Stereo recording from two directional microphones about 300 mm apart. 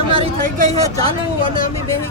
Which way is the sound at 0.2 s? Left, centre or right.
Right.